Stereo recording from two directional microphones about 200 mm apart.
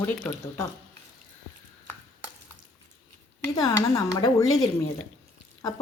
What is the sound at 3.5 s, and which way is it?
Speech, 15° left (ahead or behind).